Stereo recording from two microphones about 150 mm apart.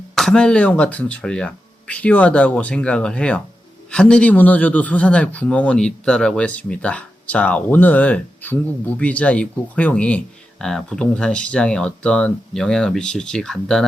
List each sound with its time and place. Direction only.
0.2 s speech: 5° left (ahead or behind)